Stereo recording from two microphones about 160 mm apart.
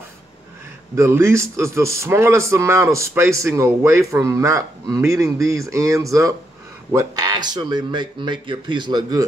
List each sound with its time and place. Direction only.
0.9 s a man's voice: 15° right (ahead or behind)